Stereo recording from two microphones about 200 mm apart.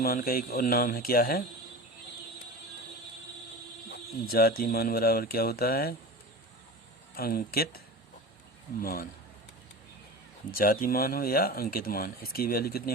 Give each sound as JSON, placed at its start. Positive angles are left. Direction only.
{"t": 0.0, "sound": "speech", "side_deg": 50}
{"t": 4.3, "sound": "speech", "side_deg": 50}
{"t": 7.2, "sound": "speech", "side_deg": 50}
{"t": 8.8, "sound": "speech", "side_deg": 45}
{"t": 10.6, "sound": "speech", "side_deg": 45}